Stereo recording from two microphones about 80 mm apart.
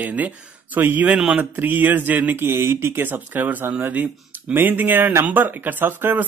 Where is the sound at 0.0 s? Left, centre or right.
Centre.